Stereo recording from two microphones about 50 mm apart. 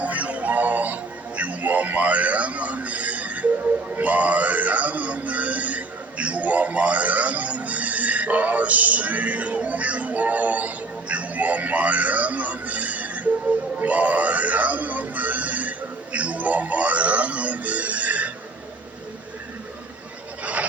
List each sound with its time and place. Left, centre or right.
0.0 s music: right
1.4 s a man's voice: right
13.7 s music: right
20.4 s a sound: right